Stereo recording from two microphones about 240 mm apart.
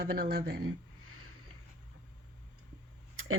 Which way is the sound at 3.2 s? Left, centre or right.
Right.